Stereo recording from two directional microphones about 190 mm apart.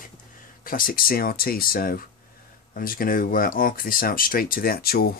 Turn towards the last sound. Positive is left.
turn(degrees=55)  # may be behind; listen again after turning